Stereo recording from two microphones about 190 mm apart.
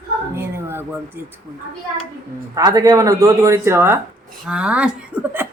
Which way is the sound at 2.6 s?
20° right (ahead or behind).